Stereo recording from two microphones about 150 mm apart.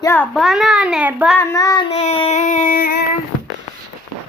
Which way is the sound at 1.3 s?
20° left (ahead or behind).